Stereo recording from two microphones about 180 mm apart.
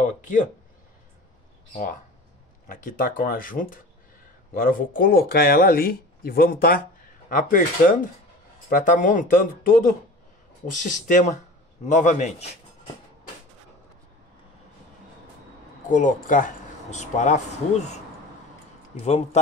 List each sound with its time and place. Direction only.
0.0 s speech: 45° left (ahead or behind)
1.7 s a man's voice: 45° left (ahead or behind)
15.9 s speech: 45° left (ahead or behind)